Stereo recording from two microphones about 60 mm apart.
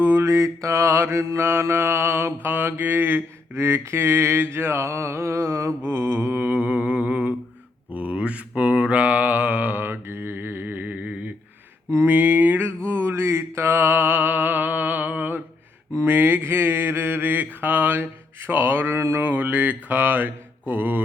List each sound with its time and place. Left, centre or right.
0.0 s mantra: right
5.8 s mantra: right